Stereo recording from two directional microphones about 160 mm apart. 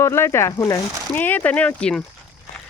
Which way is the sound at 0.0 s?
15° left (ahead or behind).